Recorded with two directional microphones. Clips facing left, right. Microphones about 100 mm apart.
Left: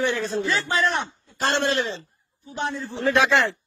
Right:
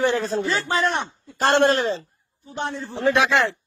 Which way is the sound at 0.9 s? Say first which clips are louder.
Right 1 dB; 55° right (ahead or behind).